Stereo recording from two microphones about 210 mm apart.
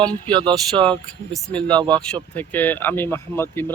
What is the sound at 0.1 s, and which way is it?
Speech, 5° left (ahead or behind).